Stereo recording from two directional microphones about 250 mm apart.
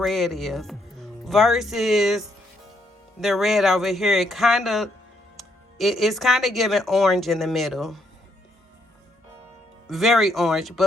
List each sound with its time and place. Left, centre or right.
0.0 s speech: centre
9.8 s speech: centre